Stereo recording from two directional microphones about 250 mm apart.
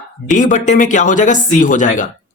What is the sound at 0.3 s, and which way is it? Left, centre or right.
Speech, left.